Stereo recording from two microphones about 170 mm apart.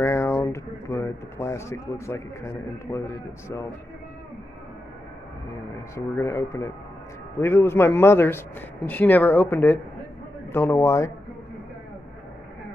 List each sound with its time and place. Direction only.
0.0 s speech: 15° left (ahead or behind)
5.9 s speech: 15° left (ahead or behind)